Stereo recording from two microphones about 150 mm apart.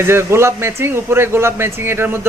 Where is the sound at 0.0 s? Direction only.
15° right (ahead or behind).